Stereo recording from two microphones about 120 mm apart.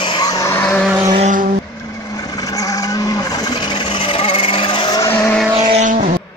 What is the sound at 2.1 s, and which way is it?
Vehicle, 30° left (ahead or behind).